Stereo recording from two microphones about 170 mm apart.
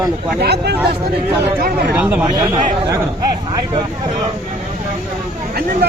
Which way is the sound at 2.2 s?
25° right (ahead or behind).